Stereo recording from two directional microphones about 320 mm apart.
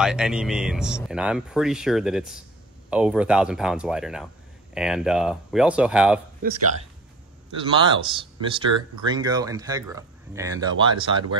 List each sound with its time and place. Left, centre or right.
0.0 s speech: centre
7.5 s speech: centre